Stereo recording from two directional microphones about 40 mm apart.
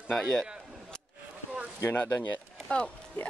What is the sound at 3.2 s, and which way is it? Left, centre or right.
Speech, left.